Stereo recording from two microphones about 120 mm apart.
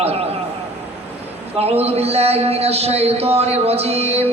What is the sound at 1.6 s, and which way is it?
A man's voice, 60° right (ahead or behind).